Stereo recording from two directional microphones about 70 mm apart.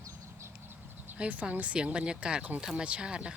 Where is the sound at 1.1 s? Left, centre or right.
Centre.